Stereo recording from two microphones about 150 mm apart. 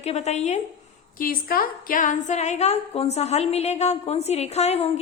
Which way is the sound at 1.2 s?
80° left.